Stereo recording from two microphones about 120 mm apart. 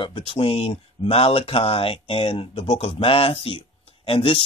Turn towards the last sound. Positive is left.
turn(degrees=50)  # may be behind; listen again after turning